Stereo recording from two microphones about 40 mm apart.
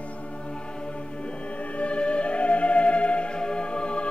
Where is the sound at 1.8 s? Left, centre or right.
Left.